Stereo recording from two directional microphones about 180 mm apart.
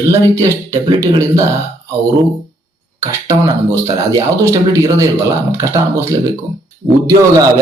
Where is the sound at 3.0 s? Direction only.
15° right (ahead or behind).